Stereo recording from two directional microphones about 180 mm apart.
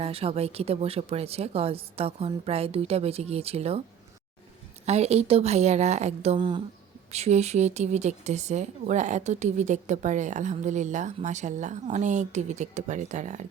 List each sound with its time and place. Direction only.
0.0 s speech: 30° right (ahead or behind)
4.9 s speech: 35° right (ahead or behind)